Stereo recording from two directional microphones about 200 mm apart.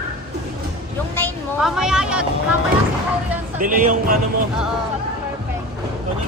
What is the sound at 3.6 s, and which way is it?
Speech, 40° right (ahead or behind).